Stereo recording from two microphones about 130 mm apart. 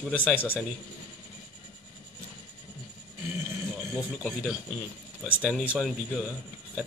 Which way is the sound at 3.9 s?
5° right (ahead or behind).